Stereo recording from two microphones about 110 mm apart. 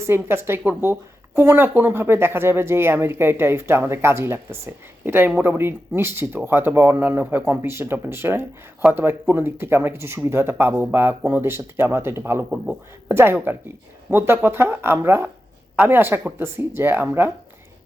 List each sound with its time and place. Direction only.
0.0 s speech: 20° right (ahead or behind)